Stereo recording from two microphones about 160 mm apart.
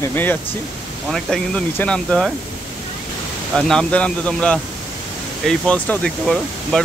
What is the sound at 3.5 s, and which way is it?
Speech, 5° left (ahead or behind).